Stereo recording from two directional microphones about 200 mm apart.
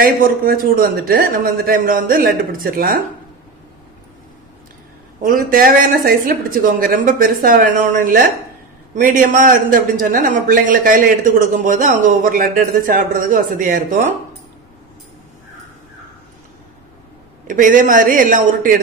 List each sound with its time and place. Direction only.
0.0 s a man's voice: 45° right (ahead or behind)
5.2 s a man's voice: 45° right (ahead or behind)
17.5 s speech: 40° right (ahead or behind)